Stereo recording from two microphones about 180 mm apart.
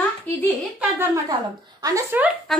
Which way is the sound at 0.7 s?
15° right (ahead or behind).